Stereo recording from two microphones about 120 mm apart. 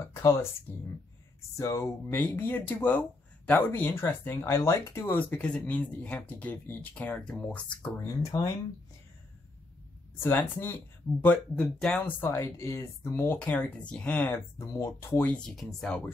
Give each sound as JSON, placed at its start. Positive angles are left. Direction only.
{"t": 0.1, "sound": "a woman's voice", "side_deg": 25}
{"t": 1.6, "sound": "speech", "side_deg": 25}
{"t": 5.3, "sound": "speech", "side_deg": 10}
{"t": 8.2, "sound": "speech", "side_deg": 25}
{"t": 10.2, "sound": "speech", "side_deg": 15}
{"t": 13.4, "sound": "speech", "side_deg": 10}
{"t": 14.6, "sound": "speech", "side_deg": 25}